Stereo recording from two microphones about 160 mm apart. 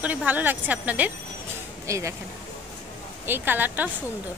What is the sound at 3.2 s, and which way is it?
Speech, 15° right (ahead or behind).